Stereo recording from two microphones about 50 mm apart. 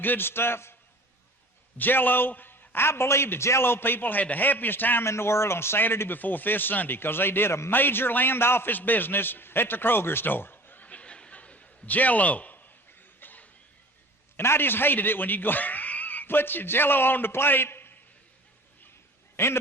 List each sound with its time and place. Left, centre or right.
0.0 s a man's voice: left
1.8 s a man's voice: left
3.6 s a man's voice: left
5.0 s speech: left
5.8 s a man's voice: left
6.1 s a man's voice: left
8.7 s a man's voice: left
10.8 s chuckle: left
14.3 s speech: left
19.4 s speech: left